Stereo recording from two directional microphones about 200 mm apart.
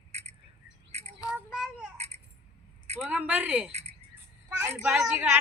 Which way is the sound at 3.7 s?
30° right (ahead or behind).